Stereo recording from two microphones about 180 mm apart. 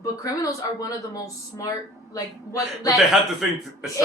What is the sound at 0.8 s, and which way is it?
A woman's voice, 20° left (ahead or behind).